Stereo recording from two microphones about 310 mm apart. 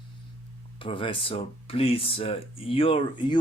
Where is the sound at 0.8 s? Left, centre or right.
Centre.